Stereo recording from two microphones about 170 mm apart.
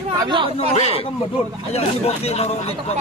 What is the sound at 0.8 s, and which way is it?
Speech, 35° left (ahead or behind).